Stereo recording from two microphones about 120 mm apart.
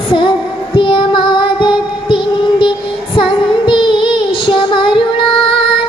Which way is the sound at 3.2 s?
45° left (ahead or behind).